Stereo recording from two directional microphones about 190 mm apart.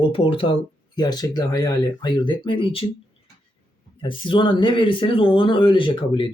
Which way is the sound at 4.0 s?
25° left (ahead or behind).